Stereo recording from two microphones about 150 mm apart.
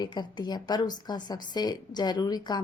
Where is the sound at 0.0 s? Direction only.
30° left (ahead or behind).